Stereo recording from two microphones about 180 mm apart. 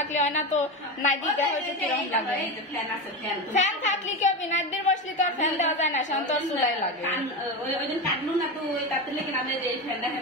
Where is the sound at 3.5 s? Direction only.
45° left (ahead or behind).